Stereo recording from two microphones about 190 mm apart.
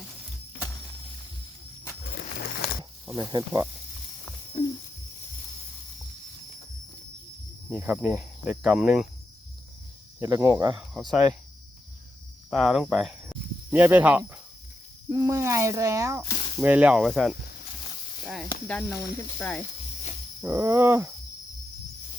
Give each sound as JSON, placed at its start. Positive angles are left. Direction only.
{"t": 2.0, "sound": "a sound", "side_deg": 55}
{"t": 3.1, "sound": "speech", "side_deg": -20}
{"t": 7.8, "sound": "speech", "side_deg": -15}
{"t": 8.2, "sound": "speech", "side_deg": 0}
{"t": 10.2, "sound": "speech", "side_deg": -15}
{"t": 10.8, "sound": "speech", "side_deg": 0}
{"t": 12.5, "sound": "speech", "side_deg": 0}
{"t": 18.7, "sound": "speech", "side_deg": 5}
{"t": 18.9, "sound": "speech", "side_deg": 55}
{"t": 19.4, "sound": "speech", "side_deg": 10}
{"t": 20.4, "sound": "speech", "side_deg": -15}